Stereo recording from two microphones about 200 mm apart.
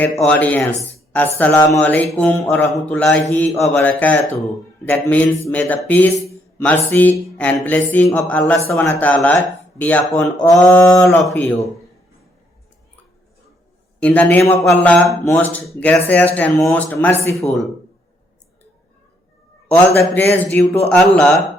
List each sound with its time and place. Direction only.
0.2 s a man's voice: 5° left (ahead or behind)
14.0 s a man's voice: 10° left (ahead or behind)
20.0 s a man's voice: 10° left (ahead or behind)